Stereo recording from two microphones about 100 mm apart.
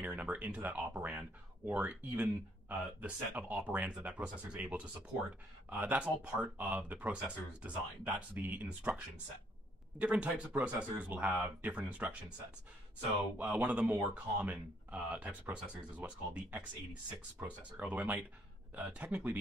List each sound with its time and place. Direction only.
0.0 s speech: 15° right (ahead or behind)
13.6 s speech: 15° right (ahead or behind)